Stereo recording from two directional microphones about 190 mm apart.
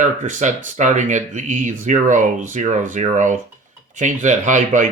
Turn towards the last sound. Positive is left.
turn(degrees=-40)  # may be behind; listen again after turning